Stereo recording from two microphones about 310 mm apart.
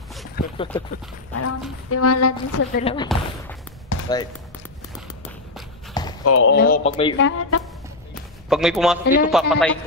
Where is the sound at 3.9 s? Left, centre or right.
Left.